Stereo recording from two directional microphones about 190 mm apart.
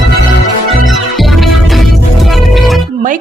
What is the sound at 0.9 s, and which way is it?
Music, centre (ahead or behind).